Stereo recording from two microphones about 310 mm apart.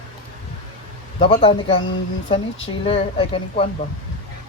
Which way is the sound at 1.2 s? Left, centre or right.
Centre.